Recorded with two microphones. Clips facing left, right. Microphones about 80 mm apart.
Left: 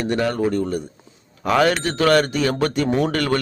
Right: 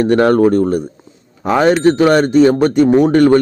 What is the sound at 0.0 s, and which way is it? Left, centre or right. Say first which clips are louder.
Speech: right 10 dB; right.